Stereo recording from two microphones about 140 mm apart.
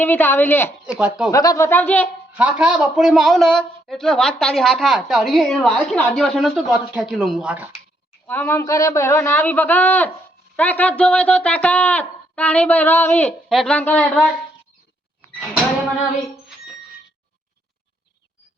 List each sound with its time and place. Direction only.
0.0 s speech: 15° left (ahead or behind)
2.3 s a man's voice: 10° right (ahead or behind)
8.3 s speech: 15° left (ahead or behind)